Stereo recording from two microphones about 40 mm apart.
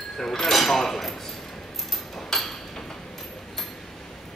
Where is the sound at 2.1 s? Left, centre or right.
Centre.